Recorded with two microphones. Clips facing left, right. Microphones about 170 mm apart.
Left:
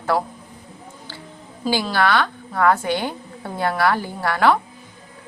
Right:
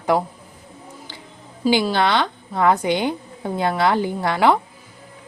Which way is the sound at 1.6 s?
20° right (ahead or behind).